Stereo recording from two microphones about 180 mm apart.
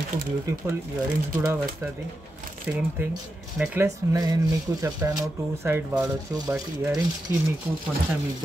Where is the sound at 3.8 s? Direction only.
20° right (ahead or behind).